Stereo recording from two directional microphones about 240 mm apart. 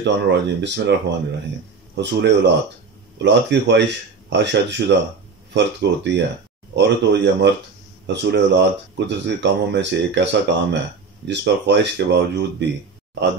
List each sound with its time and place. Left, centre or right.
0.0 s speech: right
2.0 s speech: right